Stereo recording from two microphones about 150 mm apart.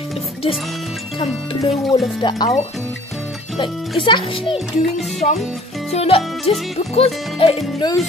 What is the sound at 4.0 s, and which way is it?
Speech, 35° left (ahead or behind).